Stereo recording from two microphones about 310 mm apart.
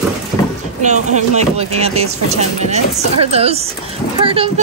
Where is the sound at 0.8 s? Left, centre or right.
Right.